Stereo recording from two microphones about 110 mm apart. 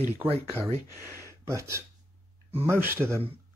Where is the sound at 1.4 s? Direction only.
25° right (ahead or behind).